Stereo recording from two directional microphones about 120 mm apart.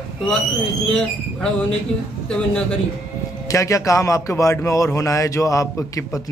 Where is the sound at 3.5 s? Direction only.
25° left (ahead or behind).